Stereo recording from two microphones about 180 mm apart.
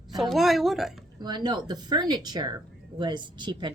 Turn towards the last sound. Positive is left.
turn(degrees=-25)  # may be behind; listen again after turning